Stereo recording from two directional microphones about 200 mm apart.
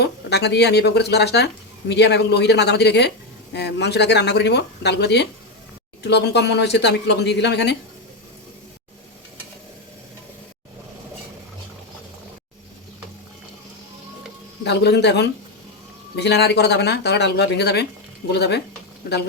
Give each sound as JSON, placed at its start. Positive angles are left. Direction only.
{"t": 0.0, "sound": "speech", "side_deg": 55}
{"t": 14.6, "sound": "speech", "side_deg": 55}